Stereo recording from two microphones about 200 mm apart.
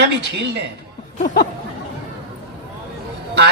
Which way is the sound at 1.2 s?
45° left (ahead or behind).